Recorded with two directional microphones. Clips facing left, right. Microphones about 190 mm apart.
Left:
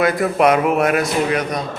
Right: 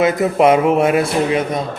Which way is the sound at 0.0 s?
20° right (ahead or behind).